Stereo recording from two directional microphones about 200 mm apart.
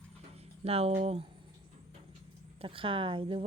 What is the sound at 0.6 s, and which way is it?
Speech, 30° right (ahead or behind).